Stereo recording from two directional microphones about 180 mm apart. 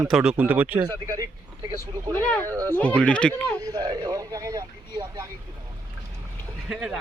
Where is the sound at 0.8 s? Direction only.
20° right (ahead or behind).